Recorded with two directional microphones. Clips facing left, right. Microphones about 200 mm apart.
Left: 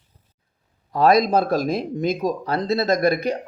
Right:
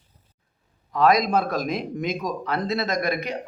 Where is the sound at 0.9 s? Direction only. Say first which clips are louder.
Left 3 dB; 35° left (ahead or behind).